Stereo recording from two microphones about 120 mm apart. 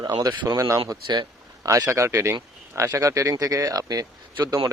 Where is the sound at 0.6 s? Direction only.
25° right (ahead or behind).